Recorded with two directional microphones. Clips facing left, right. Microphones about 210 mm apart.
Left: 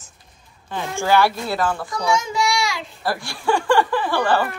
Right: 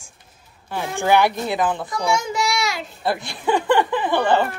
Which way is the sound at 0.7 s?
15° right (ahead or behind).